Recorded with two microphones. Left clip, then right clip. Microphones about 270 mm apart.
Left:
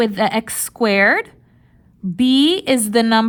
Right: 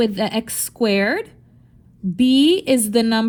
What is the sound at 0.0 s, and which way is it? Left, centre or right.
A woman's voice, left.